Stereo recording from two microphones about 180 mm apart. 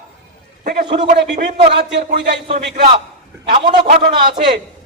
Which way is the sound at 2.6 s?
70° right (ahead or behind).